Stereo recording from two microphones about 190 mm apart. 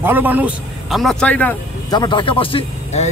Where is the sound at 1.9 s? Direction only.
25° left (ahead or behind).